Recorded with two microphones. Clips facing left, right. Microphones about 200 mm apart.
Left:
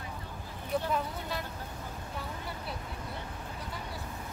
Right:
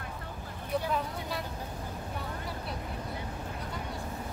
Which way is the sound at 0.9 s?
Centre (ahead or behind).